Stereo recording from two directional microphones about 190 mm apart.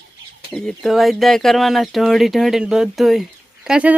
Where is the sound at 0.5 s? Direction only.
Centre (ahead or behind).